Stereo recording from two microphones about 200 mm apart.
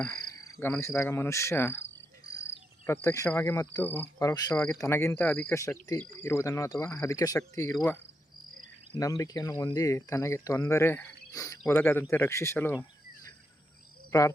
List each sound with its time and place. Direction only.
0.4 s speech: 15° left (ahead or behind)
2.8 s speech: 10° left (ahead or behind)
9.0 s speech: 15° left (ahead or behind)
14.1 s speech: 15° left (ahead or behind)